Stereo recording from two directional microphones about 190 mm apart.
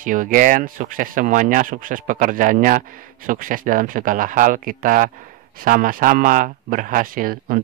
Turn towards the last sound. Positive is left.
turn(degrees=-50)  # may be behind; listen again after turning